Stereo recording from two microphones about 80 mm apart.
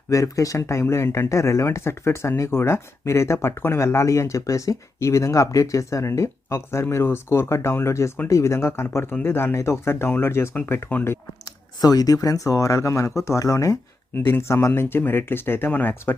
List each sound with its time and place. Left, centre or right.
0.1 s speech: left
11.8 s speech: left
14.2 s speech: left